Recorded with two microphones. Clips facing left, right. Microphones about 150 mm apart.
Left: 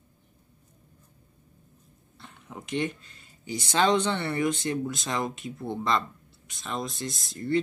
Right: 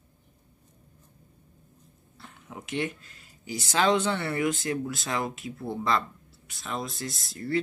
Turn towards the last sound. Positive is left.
turn(degrees=-5)  # may be behind; listen again after turning